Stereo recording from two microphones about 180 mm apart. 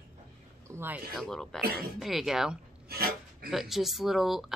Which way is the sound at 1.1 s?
5° left (ahead or behind).